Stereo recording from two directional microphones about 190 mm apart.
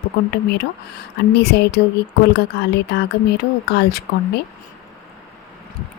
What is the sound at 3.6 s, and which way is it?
Speech, 60° left (ahead or behind).